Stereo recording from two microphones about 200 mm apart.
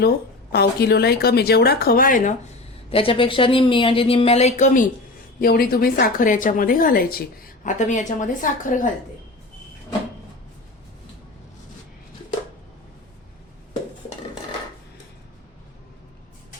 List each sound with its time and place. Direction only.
0.5 s a woman's voice: 55° left (ahead or behind)
2.9 s a woman's voice: 25° left (ahead or behind)